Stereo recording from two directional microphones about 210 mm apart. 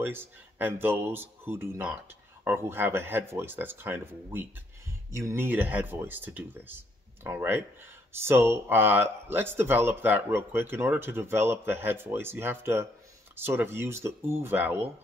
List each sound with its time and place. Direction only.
0.0 s speech: 10° right (ahead or behind)